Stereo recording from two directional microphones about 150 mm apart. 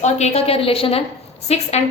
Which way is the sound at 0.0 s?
45° left (ahead or behind).